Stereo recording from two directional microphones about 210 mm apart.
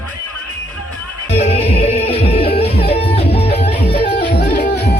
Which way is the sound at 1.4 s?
30° left (ahead or behind).